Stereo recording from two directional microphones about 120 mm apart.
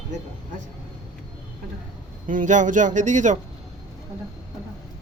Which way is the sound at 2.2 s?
90° right.